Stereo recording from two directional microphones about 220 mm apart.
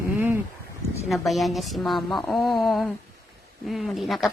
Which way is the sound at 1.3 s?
Centre (ahead or behind).